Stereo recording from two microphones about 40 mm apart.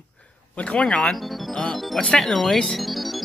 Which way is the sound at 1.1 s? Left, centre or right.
Centre.